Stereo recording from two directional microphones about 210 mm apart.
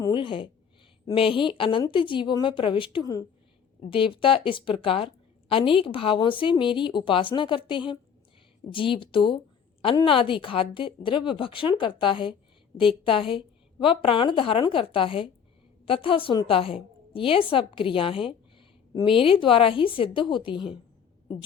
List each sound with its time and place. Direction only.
0.0 s a woman's voice: 25° left (ahead or behind)